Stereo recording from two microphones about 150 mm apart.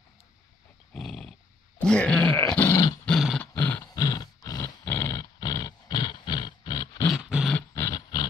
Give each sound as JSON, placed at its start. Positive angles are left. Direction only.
{"t": 0.9, "sound": "dog", "side_deg": 0}
{"t": 1.9, "sound": "groan", "side_deg": 5}
{"t": 2.3, "sound": "dog", "side_deg": 15}
{"t": 3.1, "sound": "dog", "side_deg": 0}
{"t": 3.5, "sound": "roar", "side_deg": 15}
{"t": 3.9, "sound": "dog", "side_deg": 25}
{"t": 7.1, "sound": "dog", "side_deg": -5}
{"t": 7.5, "sound": "dog", "side_deg": 20}